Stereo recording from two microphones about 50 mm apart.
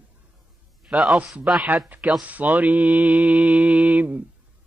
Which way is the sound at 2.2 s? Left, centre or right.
Right.